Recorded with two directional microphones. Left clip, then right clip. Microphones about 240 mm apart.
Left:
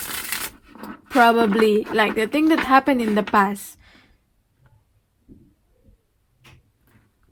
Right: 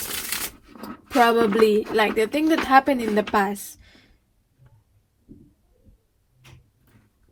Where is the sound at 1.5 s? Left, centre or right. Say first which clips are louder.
Even; left.